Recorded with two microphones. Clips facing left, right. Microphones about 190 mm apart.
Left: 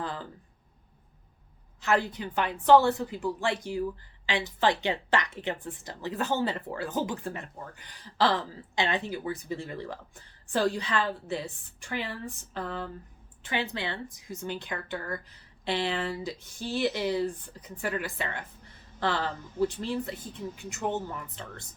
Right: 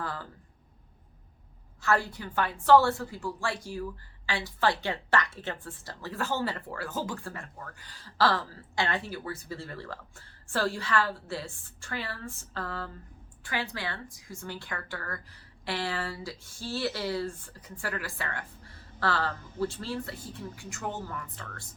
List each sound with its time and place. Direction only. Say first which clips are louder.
0.0 s speech: left 2 dB; 20° left (ahead or behind)
1.8 s speech: left 1 dB; 20° left (ahead or behind)